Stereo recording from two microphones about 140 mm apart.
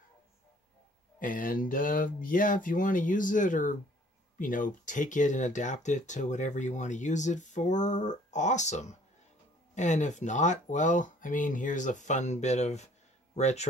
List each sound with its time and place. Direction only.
1.2 s speech: 80° left; by 13.7 s 55° left (ahead or behind)